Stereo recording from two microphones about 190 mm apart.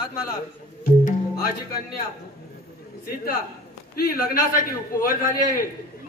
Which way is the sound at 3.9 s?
50° left (ahead or behind).